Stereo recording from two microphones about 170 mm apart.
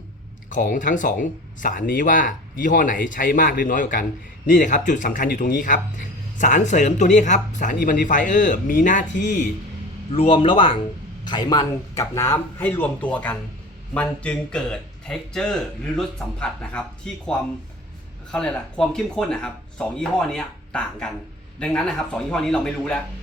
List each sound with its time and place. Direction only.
0.5 s speech: 50° left (ahead or behind)
10.1 s a man's voice: 30° left (ahead or behind); by 16.8 s 5° left (ahead or behind)
18.3 s speech: 5° left (ahead or behind)